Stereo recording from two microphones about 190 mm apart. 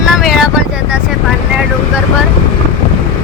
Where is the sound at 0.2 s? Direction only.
Centre (ahead or behind).